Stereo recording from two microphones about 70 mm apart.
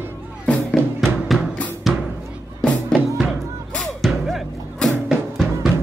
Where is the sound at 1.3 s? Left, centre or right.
Centre.